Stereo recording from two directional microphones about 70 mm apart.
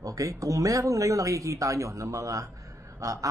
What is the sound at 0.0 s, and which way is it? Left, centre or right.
Speech, right.